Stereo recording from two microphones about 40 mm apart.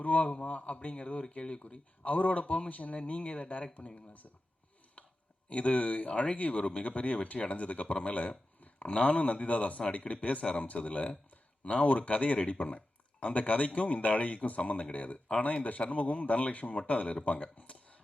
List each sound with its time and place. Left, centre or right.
0.0 s speech: left
2.0 s speech: left
5.0 s a sound: left
5.5 s speech: left